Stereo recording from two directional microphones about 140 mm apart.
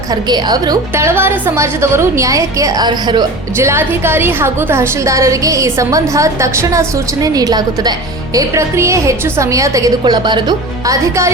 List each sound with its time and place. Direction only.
0.1 s a woman's voice: 30° right (ahead or behind)
10.0 s a woman's voice: 35° right (ahead or behind)
10.8 s a woman's voice: 20° right (ahead or behind)